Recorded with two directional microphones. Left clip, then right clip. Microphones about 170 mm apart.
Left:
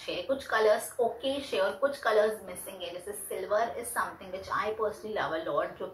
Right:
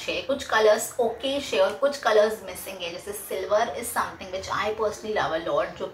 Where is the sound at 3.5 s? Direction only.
5° right (ahead or behind).